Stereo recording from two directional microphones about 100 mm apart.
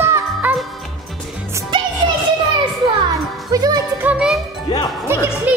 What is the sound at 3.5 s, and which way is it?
Music, 40° right (ahead or behind).